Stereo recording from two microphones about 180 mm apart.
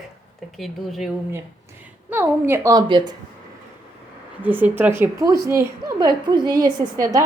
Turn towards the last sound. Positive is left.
turn(degrees=-20)  # may be behind; listen again after turning